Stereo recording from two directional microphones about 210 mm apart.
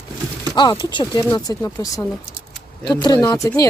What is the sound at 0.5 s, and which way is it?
Speech, 20° left (ahead or behind).